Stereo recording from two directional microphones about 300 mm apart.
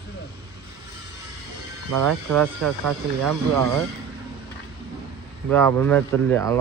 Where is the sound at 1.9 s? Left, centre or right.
Right.